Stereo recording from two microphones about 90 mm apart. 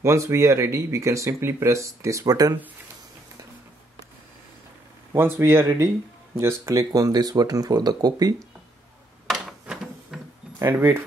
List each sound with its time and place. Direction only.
0.0 s speech: 30° right (ahead or behind)
5.1 s speech: 25° right (ahead or behind); by 8.4 s 45° right (ahead or behind)
9.3 s a sound: 5° right (ahead or behind)
10.6 s speech: 30° right (ahead or behind)